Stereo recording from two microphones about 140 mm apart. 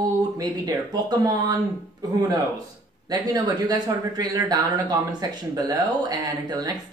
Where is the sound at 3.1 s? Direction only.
30° right (ahead or behind).